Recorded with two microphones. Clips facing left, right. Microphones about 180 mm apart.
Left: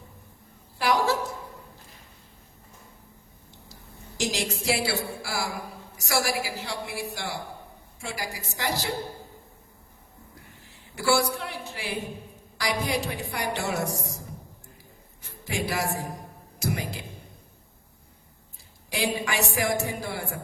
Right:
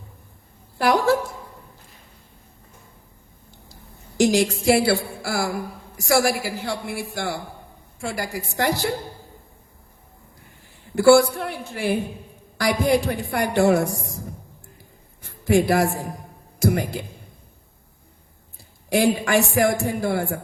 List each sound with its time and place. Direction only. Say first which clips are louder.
0.8 s a woman's voice: right 6 dB; 55° right (ahead or behind)
4.2 s a woman's voice: right 11 dB; 50° right (ahead or behind)
10.9 s a woman's voice: right 10 dB; 55° right (ahead or behind)
15.2 s a sound: right 12 dB; 55° right (ahead or behind)
16.6 s a woman's voice: right 9 dB; 50° right (ahead or behind)
18.9 s a woman's voice: right 9 dB; 50° right (ahead or behind)